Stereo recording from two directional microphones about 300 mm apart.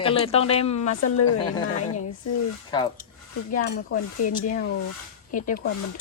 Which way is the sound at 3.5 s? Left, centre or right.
Left.